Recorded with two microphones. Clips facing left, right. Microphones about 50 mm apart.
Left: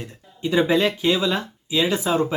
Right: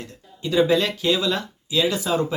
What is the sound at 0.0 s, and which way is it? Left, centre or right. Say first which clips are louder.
Speech: left 3 dB; left.